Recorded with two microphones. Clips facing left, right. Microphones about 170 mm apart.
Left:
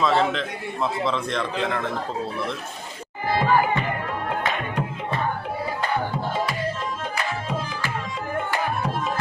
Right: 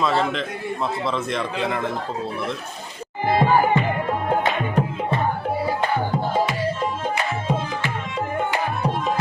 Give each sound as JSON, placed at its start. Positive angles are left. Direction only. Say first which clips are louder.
{"t": 0.0, "sound": "speech", "louder": "even", "side_deg": 0}
{"t": 3.2, "sound": "music", "louder": "right 3 dB", "side_deg": -25}
{"t": 7.4, "sound": "tabla", "louder": "right 4 dB", "side_deg": -25}